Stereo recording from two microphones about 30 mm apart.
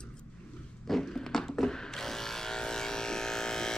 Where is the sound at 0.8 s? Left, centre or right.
Centre.